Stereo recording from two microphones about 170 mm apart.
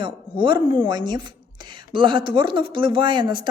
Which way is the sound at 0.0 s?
30° right (ahead or behind).